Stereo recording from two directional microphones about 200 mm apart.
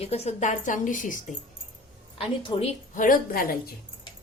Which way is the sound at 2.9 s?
45° left (ahead or behind).